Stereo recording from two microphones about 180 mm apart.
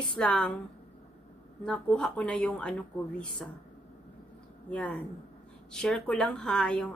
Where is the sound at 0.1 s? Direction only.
5° left (ahead or behind).